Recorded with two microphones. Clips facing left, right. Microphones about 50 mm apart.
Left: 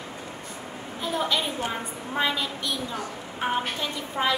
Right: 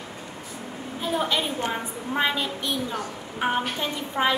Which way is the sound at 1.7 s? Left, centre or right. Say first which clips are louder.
Right 3 dB; centre.